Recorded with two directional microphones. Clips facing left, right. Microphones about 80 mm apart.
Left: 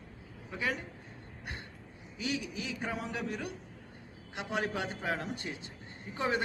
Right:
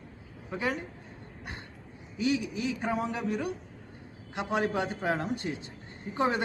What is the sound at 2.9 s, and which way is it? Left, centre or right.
A man's voice, right.